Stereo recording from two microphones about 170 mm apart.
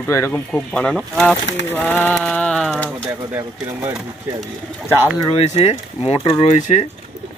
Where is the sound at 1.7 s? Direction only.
10° left (ahead or behind).